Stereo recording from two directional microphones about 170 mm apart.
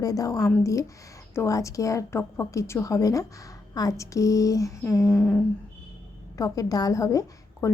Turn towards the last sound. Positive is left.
turn(degrees=20)  # may be behind; listen again after turning